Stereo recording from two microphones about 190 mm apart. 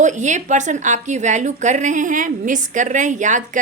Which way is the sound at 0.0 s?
40° right (ahead or behind).